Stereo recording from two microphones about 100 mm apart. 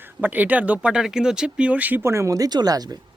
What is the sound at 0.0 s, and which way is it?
Speech, 15° right (ahead or behind).